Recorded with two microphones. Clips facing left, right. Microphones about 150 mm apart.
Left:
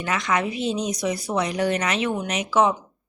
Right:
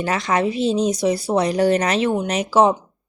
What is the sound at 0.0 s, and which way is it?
A woman's voice, 35° right (ahead or behind).